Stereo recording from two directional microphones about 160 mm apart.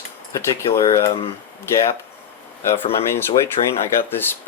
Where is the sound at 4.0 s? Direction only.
15° left (ahead or behind).